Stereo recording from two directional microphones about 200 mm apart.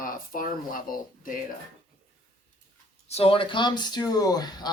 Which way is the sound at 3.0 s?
30° left (ahead or behind).